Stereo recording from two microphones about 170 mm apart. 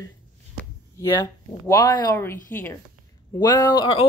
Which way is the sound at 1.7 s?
15° left (ahead or behind).